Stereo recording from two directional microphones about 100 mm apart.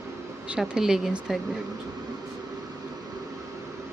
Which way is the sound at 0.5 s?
5° right (ahead or behind).